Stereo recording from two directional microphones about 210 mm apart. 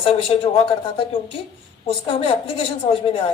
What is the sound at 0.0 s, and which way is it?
A woman's voice, 25° left (ahead or behind).